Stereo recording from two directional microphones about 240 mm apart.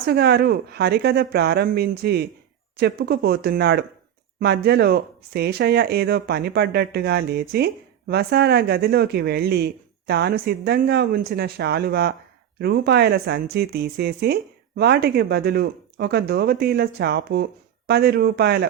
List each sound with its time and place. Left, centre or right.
0.0 s speech: right